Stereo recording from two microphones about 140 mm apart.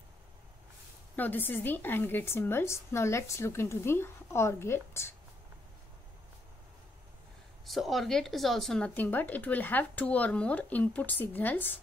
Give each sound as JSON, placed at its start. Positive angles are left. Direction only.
{"t": 1.1, "sound": "speech", "side_deg": 15}
{"t": 7.6, "sound": "speech", "side_deg": 0}